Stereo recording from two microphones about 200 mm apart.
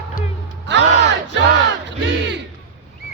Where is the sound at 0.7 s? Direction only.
60° right (ahead or behind).